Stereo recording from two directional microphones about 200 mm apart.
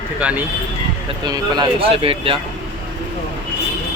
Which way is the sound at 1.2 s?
20° right (ahead or behind).